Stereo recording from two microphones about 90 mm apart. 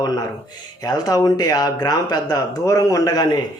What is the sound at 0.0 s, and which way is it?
Speech, 45° left (ahead or behind).